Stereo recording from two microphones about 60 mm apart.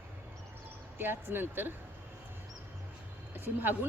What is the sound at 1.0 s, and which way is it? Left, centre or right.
Speech, right.